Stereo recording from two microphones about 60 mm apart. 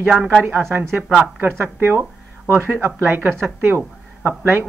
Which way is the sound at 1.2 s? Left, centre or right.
Right.